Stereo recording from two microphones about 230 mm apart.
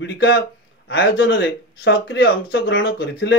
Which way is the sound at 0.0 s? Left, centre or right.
Left.